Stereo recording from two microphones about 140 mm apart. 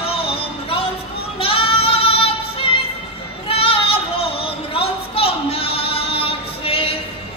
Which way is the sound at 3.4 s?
40° left (ahead or behind).